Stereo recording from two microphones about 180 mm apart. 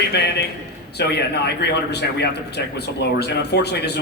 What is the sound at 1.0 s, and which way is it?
Speech, 70° left (ahead or behind).